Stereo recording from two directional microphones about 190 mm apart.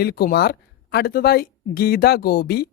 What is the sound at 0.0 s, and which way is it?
Speech, 55° left (ahead or behind).